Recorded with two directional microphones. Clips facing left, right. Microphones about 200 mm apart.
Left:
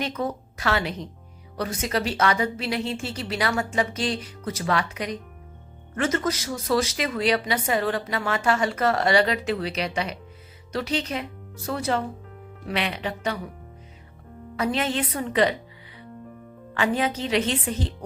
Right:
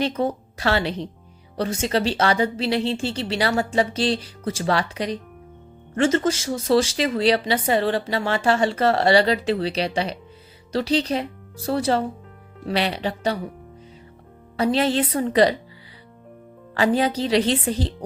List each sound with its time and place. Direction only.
0.0 s a woman's voice: 30° right (ahead or behind)
14.5 s speech: 30° right (ahead or behind)
16.7 s speech: 35° right (ahead or behind)